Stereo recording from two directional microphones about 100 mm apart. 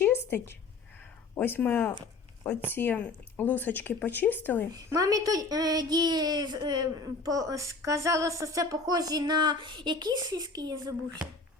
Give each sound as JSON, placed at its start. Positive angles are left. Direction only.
{"t": 0.0, "sound": "a sound", "side_deg": 20}
{"t": 1.4, "sound": "speech", "side_deg": 20}
{"t": 4.9, "sound": "speech", "side_deg": -35}